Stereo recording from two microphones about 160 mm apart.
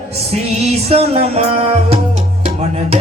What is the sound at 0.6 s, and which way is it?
Music, 40° right (ahead or behind).